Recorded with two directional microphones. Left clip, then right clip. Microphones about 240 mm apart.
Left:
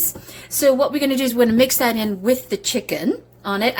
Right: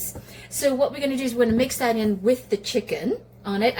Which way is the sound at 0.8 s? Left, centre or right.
Left.